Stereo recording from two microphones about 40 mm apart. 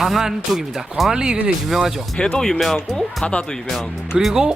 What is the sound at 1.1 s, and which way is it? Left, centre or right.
Speech, centre.